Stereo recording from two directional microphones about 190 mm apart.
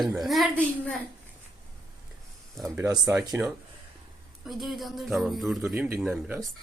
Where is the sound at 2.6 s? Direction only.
15° right (ahead or behind).